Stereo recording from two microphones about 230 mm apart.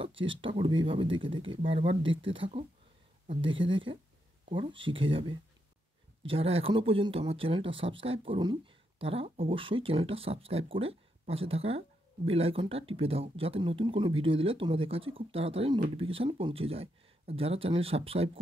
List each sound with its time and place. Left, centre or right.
0.2 s speech: right